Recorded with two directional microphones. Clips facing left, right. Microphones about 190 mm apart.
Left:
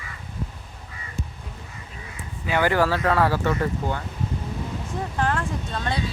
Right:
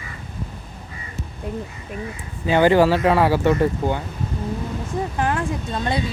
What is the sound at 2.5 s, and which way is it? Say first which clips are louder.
Speech: right 6 dB; 25° right (ahead or behind).